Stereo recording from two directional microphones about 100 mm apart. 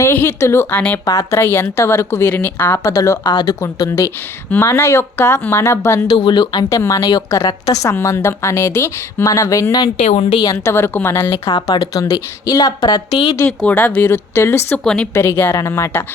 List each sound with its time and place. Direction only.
0.0 s a woman's voice: 25° left (ahead or behind)
2.9 s a woman's voice: 35° left (ahead or behind)
3.2 s speech: 50° left (ahead or behind)
3.6 s a woman's voice: 30° left (ahead or behind)
6.1 s a woman's voice: 50° left (ahead or behind); by 9.8 s 35° left (ahead or behind)
10.1 s a woman's voice: 90° left
10.3 s a woman's voice: 35° left (ahead or behind)
11.7 s a woman's voice: 40° left (ahead or behind)
13.7 s a woman's voice: 15° left (ahead or behind)